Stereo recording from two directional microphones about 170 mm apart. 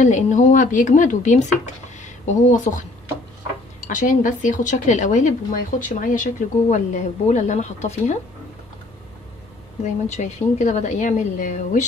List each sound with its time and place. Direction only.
0.0 s speech: 45° left (ahead or behind)
3.9 s speech: 50° left (ahead or behind)
10.0 s speech: 45° left (ahead or behind)